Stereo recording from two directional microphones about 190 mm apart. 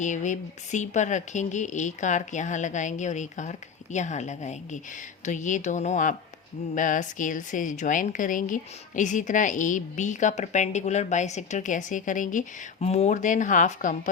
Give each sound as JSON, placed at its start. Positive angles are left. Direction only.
{"t": 0.0, "sound": "a woman's voice", "side_deg": 40}